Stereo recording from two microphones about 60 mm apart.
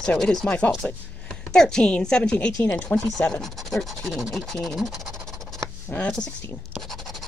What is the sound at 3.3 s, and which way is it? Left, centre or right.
Speech, centre.